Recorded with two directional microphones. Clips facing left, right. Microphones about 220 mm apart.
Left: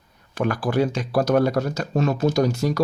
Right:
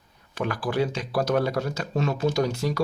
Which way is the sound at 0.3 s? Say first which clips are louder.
Left 4 dB; 45° left (ahead or behind).